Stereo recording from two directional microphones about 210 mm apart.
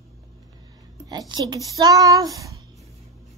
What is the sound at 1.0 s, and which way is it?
Speech, 20° right (ahead or behind).